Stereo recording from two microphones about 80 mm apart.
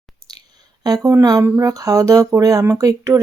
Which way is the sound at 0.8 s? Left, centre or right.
Right.